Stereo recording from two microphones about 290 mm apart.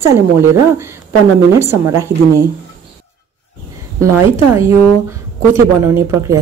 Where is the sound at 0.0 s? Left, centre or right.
Centre.